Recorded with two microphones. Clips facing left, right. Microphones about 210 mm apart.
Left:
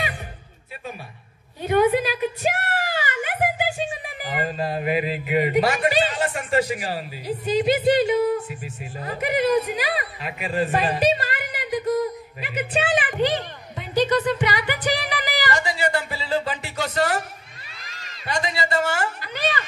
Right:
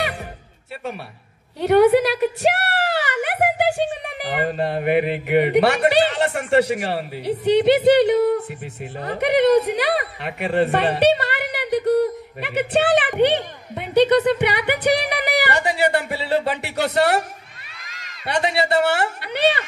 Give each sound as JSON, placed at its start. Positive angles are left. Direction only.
{"t": 1.6, "sound": "a woman's voice", "side_deg": -75}
{"t": 8.5, "sound": "a sound", "side_deg": -65}
{"t": 18.2, "sound": "a man's voice", "side_deg": -70}